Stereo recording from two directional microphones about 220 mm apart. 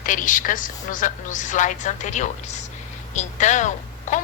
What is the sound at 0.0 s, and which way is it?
A woman's voice, 35° left (ahead or behind).